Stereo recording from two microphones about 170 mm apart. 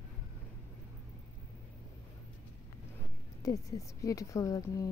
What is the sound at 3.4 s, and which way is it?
A woman's voice, 20° left (ahead or behind).